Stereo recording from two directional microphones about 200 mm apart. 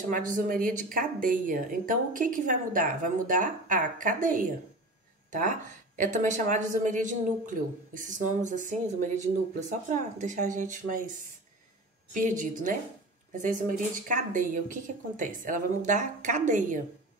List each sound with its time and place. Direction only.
0.1 s a woman's voice: 40° right (ahead or behind)
12.1 s speech: 40° right (ahead or behind)